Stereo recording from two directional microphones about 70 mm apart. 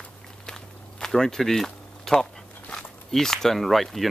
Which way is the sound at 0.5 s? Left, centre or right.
Centre.